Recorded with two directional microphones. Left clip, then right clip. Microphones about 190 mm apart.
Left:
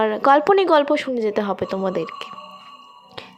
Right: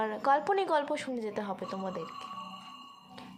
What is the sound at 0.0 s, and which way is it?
Speech, 30° left (ahead or behind).